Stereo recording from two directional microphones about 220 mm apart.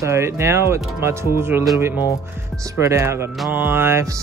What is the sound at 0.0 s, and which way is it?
Speech, 10° right (ahead or behind).